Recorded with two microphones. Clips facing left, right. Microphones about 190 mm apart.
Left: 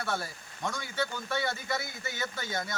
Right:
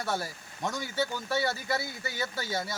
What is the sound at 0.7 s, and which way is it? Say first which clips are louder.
Speech: right 3 dB; 40° right (ahead or behind).